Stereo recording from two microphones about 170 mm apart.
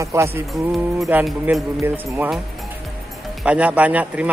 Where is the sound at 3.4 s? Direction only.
10° right (ahead or behind).